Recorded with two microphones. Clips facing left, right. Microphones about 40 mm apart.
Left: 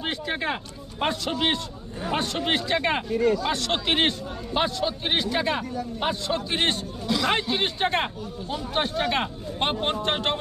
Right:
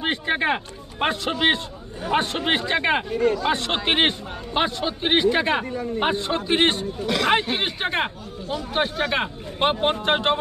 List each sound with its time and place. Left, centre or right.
0.0 s a man's voice: right
7.0 s speech: right
7.6 s speech: centre